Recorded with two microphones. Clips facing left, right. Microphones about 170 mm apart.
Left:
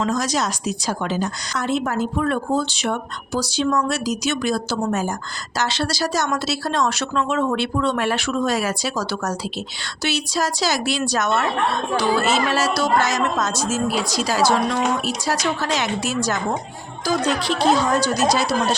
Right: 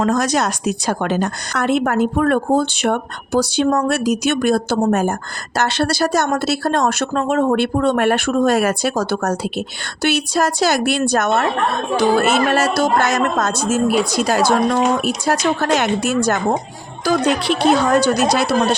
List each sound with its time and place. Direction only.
0.0 s speech: 60° right (ahead or behind)